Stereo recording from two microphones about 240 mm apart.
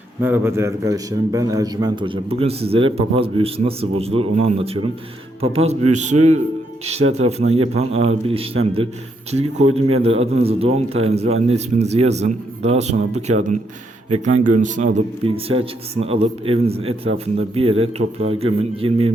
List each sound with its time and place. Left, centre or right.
0.2 s a man's voice: centre